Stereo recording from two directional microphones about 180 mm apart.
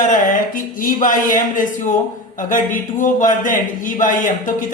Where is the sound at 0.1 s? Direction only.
50° left (ahead or behind).